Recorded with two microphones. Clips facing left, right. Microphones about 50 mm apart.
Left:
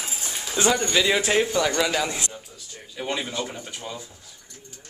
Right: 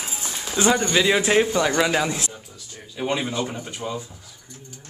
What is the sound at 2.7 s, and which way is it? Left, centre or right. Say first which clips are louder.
Speech: right 4 dB; right.